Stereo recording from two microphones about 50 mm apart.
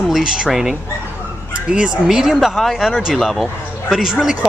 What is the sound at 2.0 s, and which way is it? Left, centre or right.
Speech, centre.